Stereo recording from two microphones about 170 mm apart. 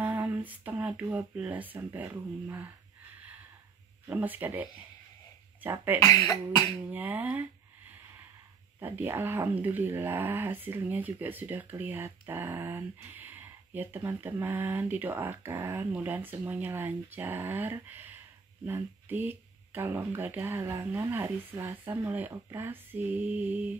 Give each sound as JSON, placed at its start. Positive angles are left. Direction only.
{"t": 0.0, "sound": "speech", "side_deg": -10}
{"t": 4.1, "sound": "speech", "side_deg": -10}
{"t": 6.0, "sound": "speech", "side_deg": 20}
{"t": 6.9, "sound": "speech", "side_deg": -10}
{"t": 8.7, "sound": "speech", "side_deg": -15}